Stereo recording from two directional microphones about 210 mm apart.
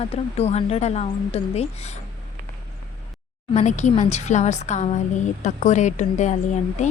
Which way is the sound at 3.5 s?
35° left (ahead or behind).